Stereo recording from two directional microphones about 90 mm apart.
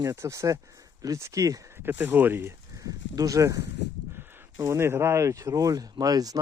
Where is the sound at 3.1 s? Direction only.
40° right (ahead or behind).